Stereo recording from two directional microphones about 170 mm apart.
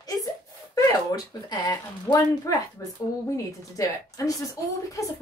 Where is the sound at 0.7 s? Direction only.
20° left (ahead or behind).